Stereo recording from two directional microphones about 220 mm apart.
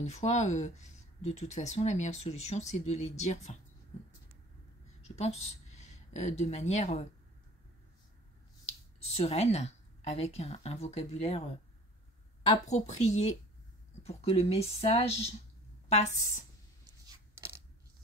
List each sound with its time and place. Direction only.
0.0 s speech: 30° left (ahead or behind)
5.0 s a woman's voice: 30° left (ahead or behind)
9.0 s speech: 30° left (ahead or behind)
12.6 s speech: 30° left (ahead or behind)